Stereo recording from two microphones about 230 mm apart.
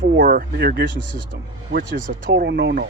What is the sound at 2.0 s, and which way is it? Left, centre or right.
Speech, right.